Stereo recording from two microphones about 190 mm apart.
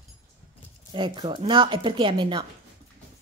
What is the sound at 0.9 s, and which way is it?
Speech, 25° right (ahead or behind).